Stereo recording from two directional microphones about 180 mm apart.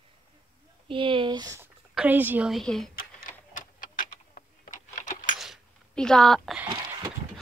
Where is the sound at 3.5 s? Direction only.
45° left (ahead or behind).